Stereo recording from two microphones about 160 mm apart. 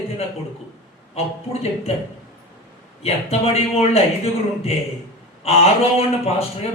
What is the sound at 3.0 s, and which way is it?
Speech, 40° left (ahead or behind).